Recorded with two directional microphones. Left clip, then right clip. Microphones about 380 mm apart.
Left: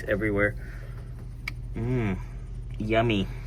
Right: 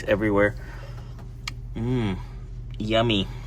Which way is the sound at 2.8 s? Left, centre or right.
Centre.